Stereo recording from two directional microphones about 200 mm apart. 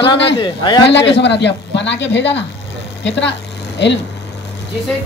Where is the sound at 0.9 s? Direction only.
60° left (ahead or behind).